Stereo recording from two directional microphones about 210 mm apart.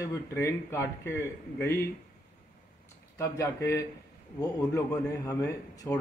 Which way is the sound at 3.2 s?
15° left (ahead or behind).